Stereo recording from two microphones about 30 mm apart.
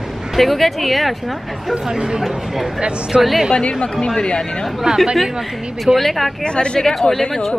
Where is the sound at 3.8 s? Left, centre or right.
Left.